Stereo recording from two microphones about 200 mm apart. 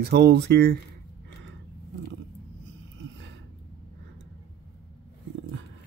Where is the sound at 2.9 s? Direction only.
65° right (ahead or behind).